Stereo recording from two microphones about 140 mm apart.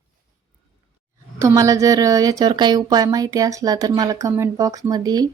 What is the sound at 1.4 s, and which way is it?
Speech, 20° right (ahead or behind).